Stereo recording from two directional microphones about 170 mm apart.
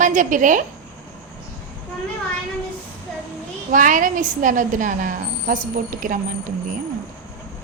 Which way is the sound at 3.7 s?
50° right (ahead or behind).